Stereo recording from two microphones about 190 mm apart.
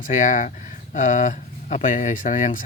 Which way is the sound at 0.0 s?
40° left (ahead or behind).